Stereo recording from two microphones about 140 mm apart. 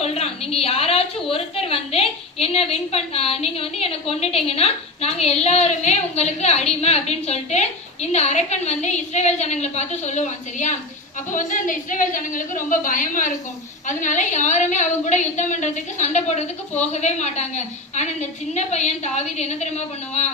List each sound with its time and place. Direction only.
0.0 s a sound: 50° left (ahead or behind)
1.3 s a woman's voice: 45° left (ahead or behind); by 13.3 s 70° left (ahead or behind)
13.8 s a woman's voice: 60° left (ahead or behind)